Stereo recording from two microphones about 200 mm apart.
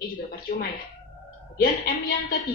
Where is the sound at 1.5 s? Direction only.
50° left (ahead or behind).